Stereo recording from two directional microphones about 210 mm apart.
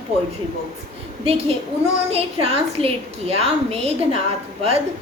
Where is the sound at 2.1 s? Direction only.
30° right (ahead or behind).